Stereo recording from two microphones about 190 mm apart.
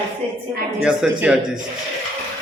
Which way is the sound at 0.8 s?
5° right (ahead or behind).